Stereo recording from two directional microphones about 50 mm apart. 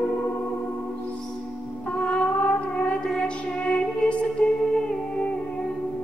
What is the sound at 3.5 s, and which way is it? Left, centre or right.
Music, left.